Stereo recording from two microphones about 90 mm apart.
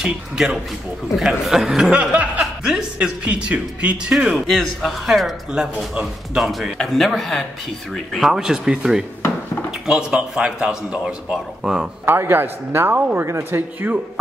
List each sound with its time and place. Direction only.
0.0 s a man's voice: 5° right (ahead or behind)
12.1 s a man's voice: 25° right (ahead or behind)